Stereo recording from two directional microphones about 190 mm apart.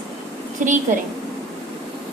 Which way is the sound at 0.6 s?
40° right (ahead or behind).